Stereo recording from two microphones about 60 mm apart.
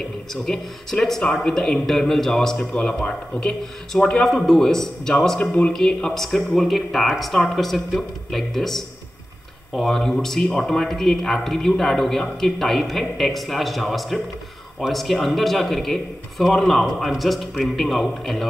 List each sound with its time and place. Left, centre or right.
0.5 s a man's voice: centre
5.4 s speech: centre
5.7 s speech: centre